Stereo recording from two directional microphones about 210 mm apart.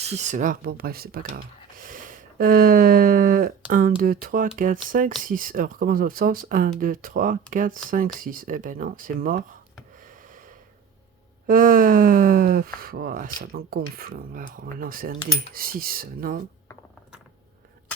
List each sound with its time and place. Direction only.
0.0 s speech: 30° right (ahead or behind)
11.4 s speech: 40° right (ahead or behind)